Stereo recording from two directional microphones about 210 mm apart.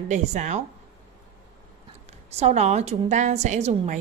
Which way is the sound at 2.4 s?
30° right (ahead or behind).